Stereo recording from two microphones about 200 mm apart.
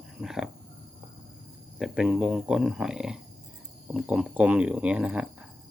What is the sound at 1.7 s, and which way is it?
Speech, 5° right (ahead or behind).